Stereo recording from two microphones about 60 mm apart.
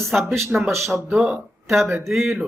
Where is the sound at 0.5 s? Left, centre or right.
Centre.